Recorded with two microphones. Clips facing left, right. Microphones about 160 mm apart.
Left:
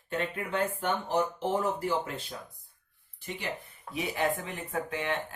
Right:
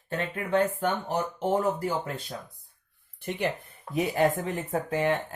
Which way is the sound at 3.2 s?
55° right (ahead or behind).